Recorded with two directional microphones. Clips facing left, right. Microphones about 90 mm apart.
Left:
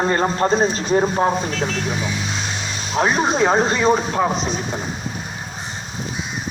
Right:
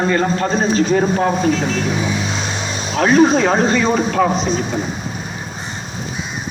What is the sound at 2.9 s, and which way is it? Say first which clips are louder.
Speech: right 6 dB; 20° left (ahead or behind).